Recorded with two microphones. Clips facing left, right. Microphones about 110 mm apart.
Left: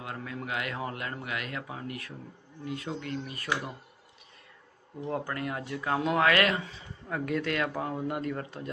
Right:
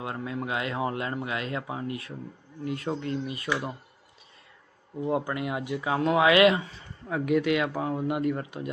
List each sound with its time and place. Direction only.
0.0 s speech: 25° right (ahead or behind)
2.6 s speech: 55° right (ahead or behind)
3.0 s speech: 25° right (ahead or behind)
5.0 s speech: 15° right (ahead or behind)
6.2 s speech: 15° right (ahead or behind)